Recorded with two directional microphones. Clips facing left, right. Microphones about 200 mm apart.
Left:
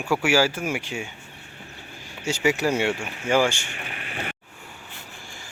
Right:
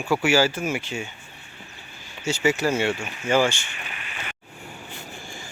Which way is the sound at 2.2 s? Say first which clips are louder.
Even; 10° left (ahead or behind).